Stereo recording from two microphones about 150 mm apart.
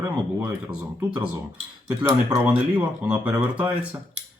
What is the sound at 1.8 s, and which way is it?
Speech, 15° right (ahead or behind).